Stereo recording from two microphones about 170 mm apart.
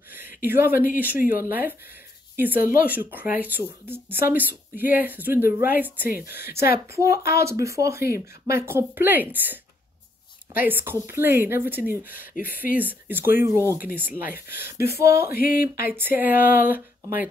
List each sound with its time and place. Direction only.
0.4 s speech: 15° right (ahead or behind)
6.0 s speech: 60° left (ahead or behind)
7.3 s speech: 15° right (ahead or behind)
10.6 s speech: 10° right (ahead or behind)
12.4 s speech: 60° left (ahead or behind)
12.7 s speech: 10° right (ahead or behind)
14.7 s speech: 70° left (ahead or behind)
15.9 s speech: 10° right (ahead or behind)